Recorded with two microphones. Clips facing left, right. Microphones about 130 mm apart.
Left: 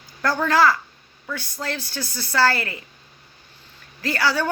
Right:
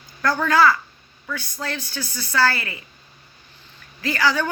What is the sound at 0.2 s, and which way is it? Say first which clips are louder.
Speech: right 1 dB; 30° left (ahead or behind).